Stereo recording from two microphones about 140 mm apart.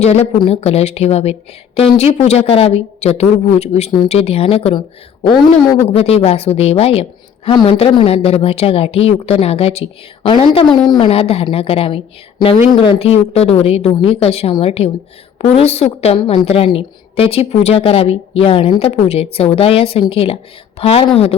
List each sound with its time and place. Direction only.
0.0 s a woman's voice: 50° left (ahead or behind)
5.9 s a woman's voice: 45° left (ahead or behind)